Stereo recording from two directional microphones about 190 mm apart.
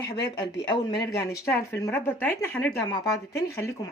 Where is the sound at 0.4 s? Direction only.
65° left (ahead or behind).